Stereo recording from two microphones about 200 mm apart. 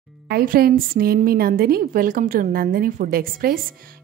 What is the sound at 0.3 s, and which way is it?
A woman's voice, 50° right (ahead or behind).